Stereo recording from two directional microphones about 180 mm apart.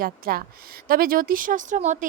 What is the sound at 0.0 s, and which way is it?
A woman's voice, 55° right (ahead or behind).